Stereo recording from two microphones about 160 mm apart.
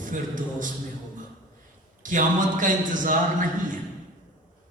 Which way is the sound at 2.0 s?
55° right (ahead or behind).